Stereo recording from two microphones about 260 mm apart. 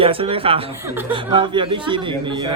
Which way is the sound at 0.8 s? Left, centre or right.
Centre.